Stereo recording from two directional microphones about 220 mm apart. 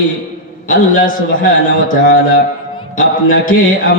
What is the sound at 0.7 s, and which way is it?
Speech, 40° left (ahead or behind).